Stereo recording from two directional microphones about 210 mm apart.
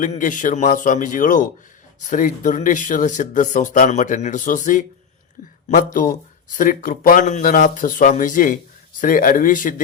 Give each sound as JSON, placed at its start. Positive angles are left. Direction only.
{"t": 0.0, "sound": "speech", "side_deg": 40}